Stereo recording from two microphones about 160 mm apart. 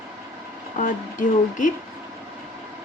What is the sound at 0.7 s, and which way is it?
Speech, 55° left (ahead or behind).